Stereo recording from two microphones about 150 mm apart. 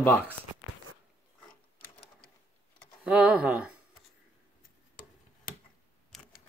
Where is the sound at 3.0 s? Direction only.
10° right (ahead or behind).